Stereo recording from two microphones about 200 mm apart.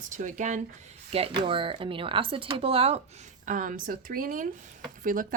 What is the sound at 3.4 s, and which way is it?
Speech, 40° right (ahead or behind).